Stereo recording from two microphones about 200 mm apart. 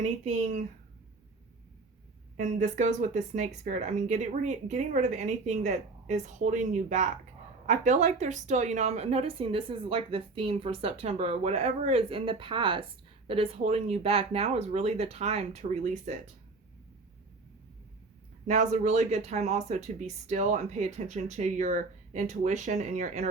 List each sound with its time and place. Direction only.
0.0 s speech: 35° right (ahead or behind)
2.4 s a woman's voice: 40° right (ahead or behind)
18.4 s speech: 35° right (ahead or behind)